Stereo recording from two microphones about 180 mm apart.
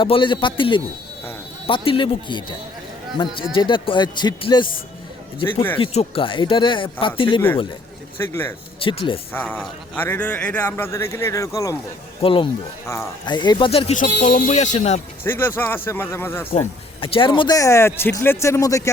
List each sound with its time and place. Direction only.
0.0 s speech: 25° left (ahead or behind)
5.7 s speech: 30° left (ahead or behind)
8.2 s speech: 15° left (ahead or behind)
8.8 s speech: 30° left (ahead or behind)
9.3 s speech: 10° left (ahead or behind)
12.2 s speech: 30° left (ahead or behind)
15.2 s speech: 10° left (ahead or behind)
16.5 s speech: 30° left (ahead or behind)